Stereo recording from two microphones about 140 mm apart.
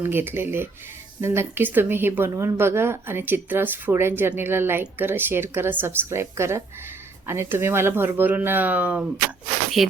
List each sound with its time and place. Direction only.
0.0 s a woman's voice: 15° right (ahead or behind)